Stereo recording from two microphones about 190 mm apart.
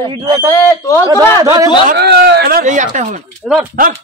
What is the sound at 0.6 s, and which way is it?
Speech, 15° left (ahead or behind).